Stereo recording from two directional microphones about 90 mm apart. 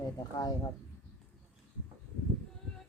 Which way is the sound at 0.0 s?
45° left (ahead or behind).